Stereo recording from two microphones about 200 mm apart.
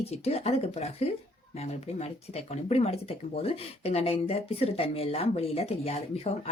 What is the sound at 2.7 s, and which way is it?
Speech, 30° left (ahead or behind).